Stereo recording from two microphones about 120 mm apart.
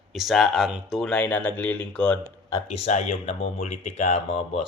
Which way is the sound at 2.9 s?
65° left (ahead or behind).